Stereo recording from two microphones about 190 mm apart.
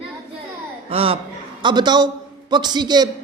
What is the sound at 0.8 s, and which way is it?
A man's voice, 30° right (ahead or behind).